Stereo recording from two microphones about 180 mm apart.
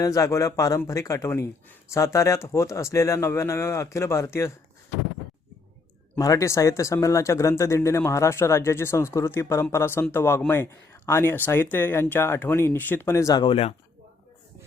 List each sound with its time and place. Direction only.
0.0 s speech: 20° left (ahead or behind)
6.1 s speech: 20° left (ahead or behind)